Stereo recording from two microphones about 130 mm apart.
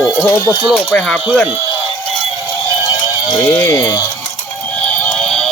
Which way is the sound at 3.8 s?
30° left (ahead or behind).